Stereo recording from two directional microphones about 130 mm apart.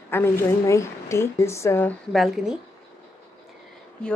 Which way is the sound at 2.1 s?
Centre (ahead or behind).